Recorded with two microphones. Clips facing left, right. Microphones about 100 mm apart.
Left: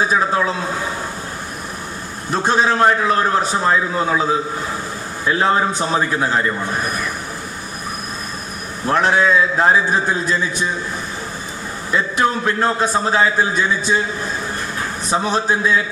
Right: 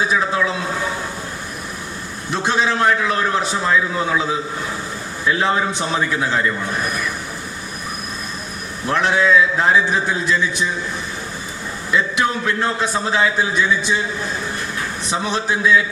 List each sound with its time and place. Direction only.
0.0 s a sound: 40° left (ahead or behind)
2.3 s a man's voice: 40° left (ahead or behind)
8.9 s a man's voice: 40° left (ahead or behind)
11.9 s a man's voice: 40° left (ahead or behind)
15.1 s a man's voice: 40° left (ahead or behind)